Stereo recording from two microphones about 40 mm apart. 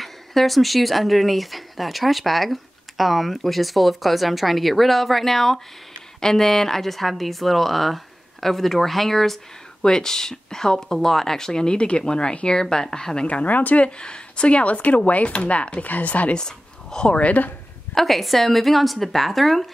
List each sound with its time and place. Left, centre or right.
0.0 s speech: centre
13.3 s speech: left
13.8 s speech: left
16.3 s speech: centre
17.9 s speech: centre